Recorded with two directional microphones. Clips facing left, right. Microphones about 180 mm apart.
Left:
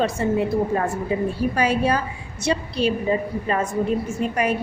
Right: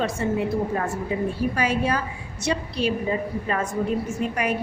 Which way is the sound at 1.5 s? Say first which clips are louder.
Left 3 dB; 35° left (ahead or behind).